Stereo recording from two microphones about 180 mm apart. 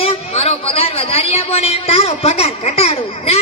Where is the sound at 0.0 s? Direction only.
35° left (ahead or behind).